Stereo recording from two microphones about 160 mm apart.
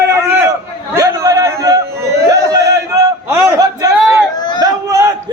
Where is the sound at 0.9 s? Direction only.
20° right (ahead or behind).